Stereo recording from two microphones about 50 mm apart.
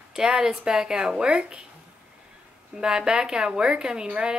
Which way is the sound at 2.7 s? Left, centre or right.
Centre.